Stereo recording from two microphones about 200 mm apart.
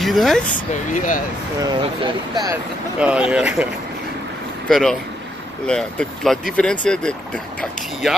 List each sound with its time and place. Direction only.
0.0 s speech: centre (ahead or behind)
0.9 s speech: 40° left (ahead or behind)
1.6 s speech: 20° right (ahead or behind)
3.0 s speech: 5° right (ahead or behind)
4.6 s speech: centre (ahead or behind)